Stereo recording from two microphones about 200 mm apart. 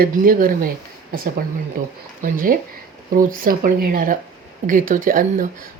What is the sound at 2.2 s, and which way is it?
Speech, 45° right (ahead or behind).